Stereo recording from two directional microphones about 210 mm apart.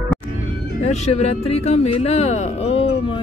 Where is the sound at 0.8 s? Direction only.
30° left (ahead or behind).